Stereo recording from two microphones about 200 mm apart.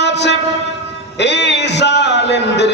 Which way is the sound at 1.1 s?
60° left (ahead or behind).